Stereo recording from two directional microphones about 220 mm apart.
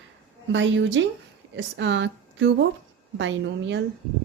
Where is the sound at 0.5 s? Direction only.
55° right (ahead or behind).